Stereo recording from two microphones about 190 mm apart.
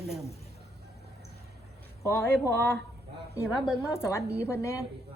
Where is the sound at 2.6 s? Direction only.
55° right (ahead or behind).